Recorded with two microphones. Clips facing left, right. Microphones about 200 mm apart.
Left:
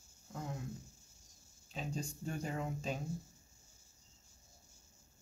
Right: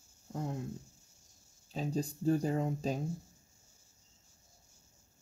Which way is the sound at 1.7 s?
35° right (ahead or behind).